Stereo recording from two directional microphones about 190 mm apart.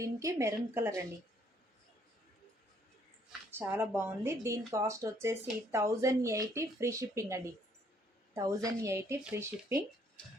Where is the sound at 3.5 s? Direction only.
10° right (ahead or behind).